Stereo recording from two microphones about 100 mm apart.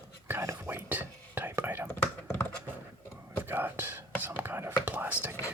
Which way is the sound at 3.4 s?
20° right (ahead or behind).